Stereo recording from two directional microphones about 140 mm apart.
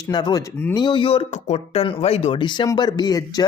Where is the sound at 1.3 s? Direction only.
55° left (ahead or behind).